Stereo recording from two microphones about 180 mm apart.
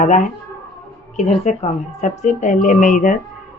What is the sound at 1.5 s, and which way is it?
A woman's voice, 40° left (ahead or behind).